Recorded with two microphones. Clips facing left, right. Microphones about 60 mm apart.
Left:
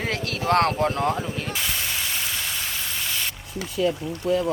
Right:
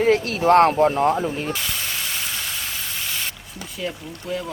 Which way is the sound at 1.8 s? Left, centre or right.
Centre.